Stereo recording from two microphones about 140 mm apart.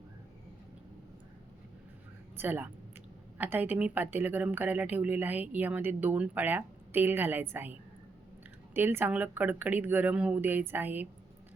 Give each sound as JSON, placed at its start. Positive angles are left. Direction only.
{"t": 2.4, "sound": "speech", "side_deg": -15}